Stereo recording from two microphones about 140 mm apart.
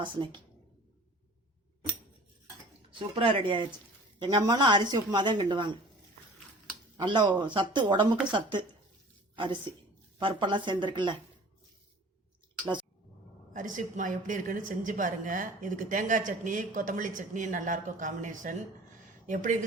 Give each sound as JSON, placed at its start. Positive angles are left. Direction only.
{"t": 0.0, "sound": "speech", "side_deg": -35}
{"t": 3.0, "sound": "speech", "side_deg": -45}
{"t": 6.9, "sound": "speech", "side_deg": -35}
{"t": 9.3, "sound": "a woman's voice", "side_deg": -35}
{"t": 13.5, "sound": "a woman's voice", "side_deg": -70}